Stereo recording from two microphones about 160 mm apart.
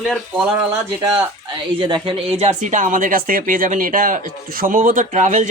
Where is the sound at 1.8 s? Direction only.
30° right (ahead or behind).